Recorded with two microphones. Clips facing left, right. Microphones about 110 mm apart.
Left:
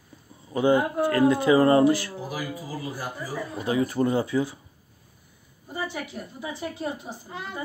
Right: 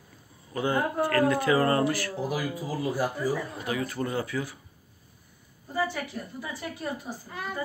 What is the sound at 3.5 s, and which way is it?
Speech, 30° left (ahead or behind).